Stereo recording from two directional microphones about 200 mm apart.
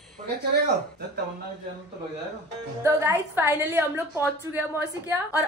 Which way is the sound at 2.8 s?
10° right (ahead or behind).